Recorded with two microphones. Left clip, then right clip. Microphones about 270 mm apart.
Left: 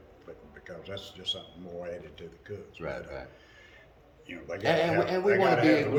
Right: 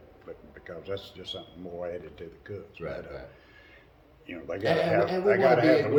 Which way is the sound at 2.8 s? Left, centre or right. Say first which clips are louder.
Left 1 dB; centre.